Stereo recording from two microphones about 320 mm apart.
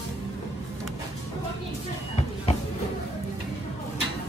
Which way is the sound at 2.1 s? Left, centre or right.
Centre.